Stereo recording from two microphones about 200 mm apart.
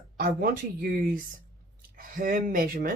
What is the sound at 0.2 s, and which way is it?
Speech, 45° right (ahead or behind).